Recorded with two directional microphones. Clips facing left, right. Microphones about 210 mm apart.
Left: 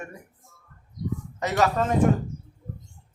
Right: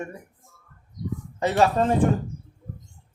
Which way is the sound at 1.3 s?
30° right (ahead or behind).